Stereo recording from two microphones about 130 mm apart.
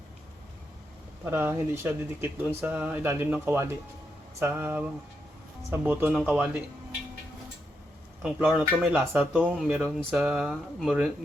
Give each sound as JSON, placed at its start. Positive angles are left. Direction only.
{"t": 1.2, "sound": "speech", "side_deg": -15}
{"t": 8.2, "sound": "speech", "side_deg": -10}
{"t": 9.8, "sound": "speech", "side_deg": 0}